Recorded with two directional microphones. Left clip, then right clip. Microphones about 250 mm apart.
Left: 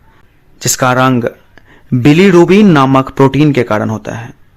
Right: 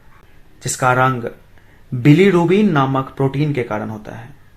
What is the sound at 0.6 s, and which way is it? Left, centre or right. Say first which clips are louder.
Speech: left 5 dB; left.